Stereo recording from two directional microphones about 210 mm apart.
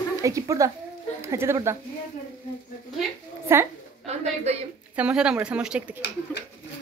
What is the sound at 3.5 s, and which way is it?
Speech, 10° right (ahead or behind).